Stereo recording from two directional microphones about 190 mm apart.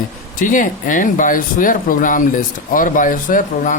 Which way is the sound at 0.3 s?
45° left (ahead or behind).